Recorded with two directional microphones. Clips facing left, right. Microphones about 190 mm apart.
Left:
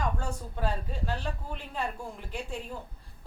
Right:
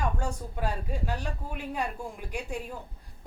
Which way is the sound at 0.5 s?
10° right (ahead or behind).